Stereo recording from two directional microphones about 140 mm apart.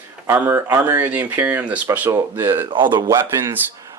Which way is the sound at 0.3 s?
15° right (ahead or behind).